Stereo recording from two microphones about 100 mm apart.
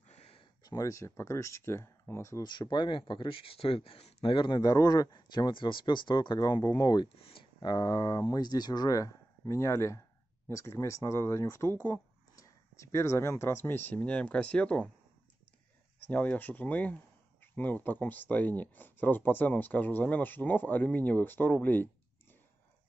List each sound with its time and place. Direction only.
0.1 s a sound: 85° left
0.7 s speech: 35° left (ahead or behind)
2.4 s speech: 45° left (ahead or behind)
7.2 s speech: 70° left (ahead or behind)
7.6 s speech: 45° left (ahead or behind); by 14.9 s 10° left (ahead or behind)
16.1 s speech: 15° left (ahead or behind)